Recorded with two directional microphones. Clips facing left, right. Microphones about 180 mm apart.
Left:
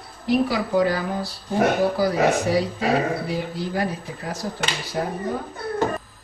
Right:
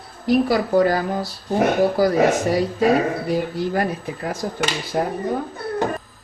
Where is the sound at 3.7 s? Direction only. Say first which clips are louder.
Right 3 dB; 55° right (ahead or behind).